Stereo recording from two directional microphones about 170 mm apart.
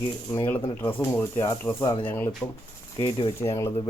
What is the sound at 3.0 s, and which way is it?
Speech, 25° left (ahead or behind).